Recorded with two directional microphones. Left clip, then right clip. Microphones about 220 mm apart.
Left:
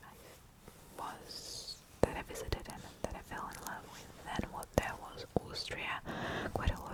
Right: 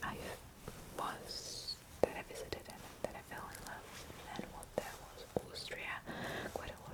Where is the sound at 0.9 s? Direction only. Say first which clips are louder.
Right 2 dB; 10° left (ahead or behind).